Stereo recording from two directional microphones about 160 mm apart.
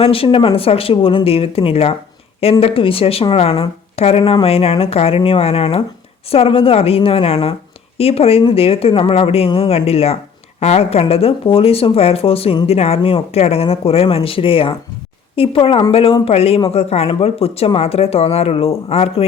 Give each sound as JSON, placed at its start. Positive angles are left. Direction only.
{"t": 0.0, "sound": "speech", "side_deg": 35}